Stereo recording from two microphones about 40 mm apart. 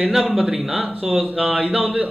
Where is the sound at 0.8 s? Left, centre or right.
Right.